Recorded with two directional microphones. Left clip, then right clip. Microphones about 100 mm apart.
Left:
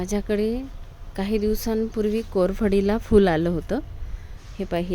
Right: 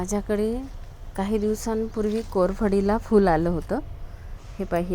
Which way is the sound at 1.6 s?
45° left (ahead or behind).